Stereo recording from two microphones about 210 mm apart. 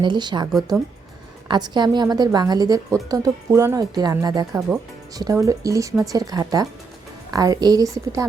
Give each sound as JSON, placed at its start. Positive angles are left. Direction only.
{"t": 0.0, "sound": "a woman's voice", "side_deg": -20}
{"t": 1.5, "sound": "a woman's voice", "side_deg": -20}